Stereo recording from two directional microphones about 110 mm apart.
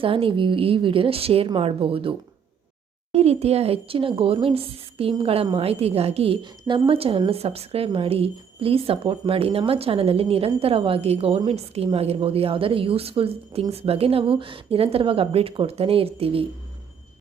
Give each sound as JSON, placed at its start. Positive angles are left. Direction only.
{"t": 0.0, "sound": "a woman's voice", "side_deg": -55}
{"t": 3.1, "sound": "a woman's voice", "side_deg": -65}
{"t": 6.4, "sound": "a woman's voice", "side_deg": -45}